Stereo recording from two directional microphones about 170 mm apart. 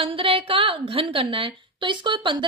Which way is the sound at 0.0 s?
30° right (ahead or behind).